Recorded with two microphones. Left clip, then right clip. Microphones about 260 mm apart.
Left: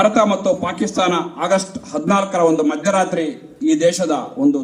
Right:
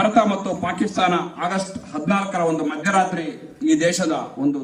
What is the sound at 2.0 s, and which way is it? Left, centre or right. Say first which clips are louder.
A man's voice: left 6 dB; left.